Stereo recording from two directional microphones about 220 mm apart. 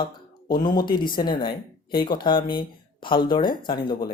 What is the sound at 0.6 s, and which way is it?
Speech, 20° left (ahead or behind).